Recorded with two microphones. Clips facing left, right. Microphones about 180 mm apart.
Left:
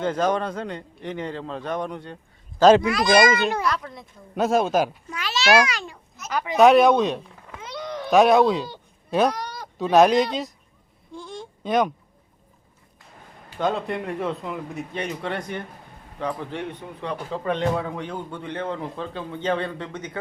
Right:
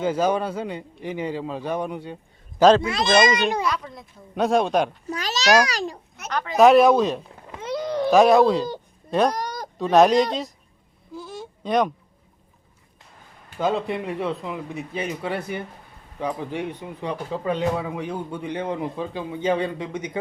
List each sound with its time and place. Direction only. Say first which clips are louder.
0.0 s speech: right 1 dB; 10° right (ahead or behind)
2.8 s a child's voice: left 1 dB; 25° right (ahead or behind)
3.7 s a man's voice: even; centre (ahead or behind)
5.0 s a child's voice: right 1 dB; 40° right (ahead or behind)
6.6 s a man's voice: right 1 dB; centre (ahead or behind)
7.6 s a sound: right 8 dB; 35° right (ahead or behind)
8.1 s a man's voice: right 1 dB; centre (ahead or behind)
9.3 s a sound: right 4 dB; 40° right (ahead or behind)
9.7 s a man's voice: even; centre (ahead or behind)
11.1 s a sound: right 1 dB; 5° right (ahead or behind)
13.6 s a man's voice: right 1 dB; centre (ahead or behind)